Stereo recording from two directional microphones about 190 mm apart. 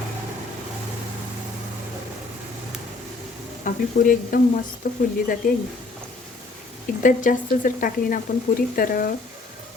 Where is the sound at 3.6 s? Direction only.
45° left (ahead or behind).